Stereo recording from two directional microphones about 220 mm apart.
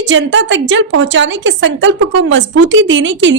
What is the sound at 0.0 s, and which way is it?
A woman's voice, 55° right (ahead or behind).